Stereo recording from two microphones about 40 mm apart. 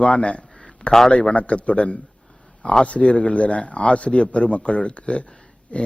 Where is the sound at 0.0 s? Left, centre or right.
Left.